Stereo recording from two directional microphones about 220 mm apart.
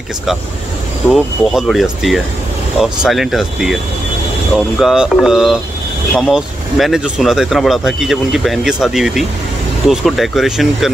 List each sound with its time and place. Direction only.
1.1 s speech: centre (ahead or behind)